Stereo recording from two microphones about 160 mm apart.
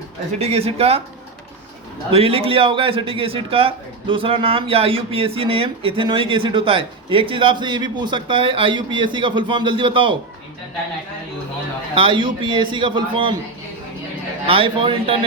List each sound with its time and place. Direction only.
0.3 s a man's voice: 40° right (ahead or behind)
2.0 s a man's voice: 35° right (ahead or behind)
11.9 s a man's voice: 30° right (ahead or behind)
14.4 s a man's voice: 35° right (ahead or behind)